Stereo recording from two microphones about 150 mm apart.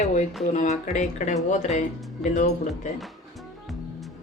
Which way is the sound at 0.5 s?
50° left (ahead or behind).